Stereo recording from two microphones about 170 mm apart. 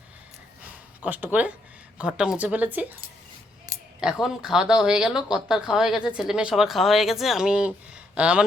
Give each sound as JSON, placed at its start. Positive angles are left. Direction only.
{"t": 0.6, "sound": "a sound", "side_deg": -10}
{"t": 2.0, "sound": "a woman's voice", "side_deg": -5}
{"t": 3.7, "sound": "scissors", "side_deg": -25}
{"t": 4.0, "sound": "a woman's voice", "side_deg": -5}